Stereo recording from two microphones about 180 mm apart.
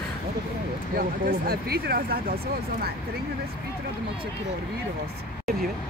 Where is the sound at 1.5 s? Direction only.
60° right (ahead or behind).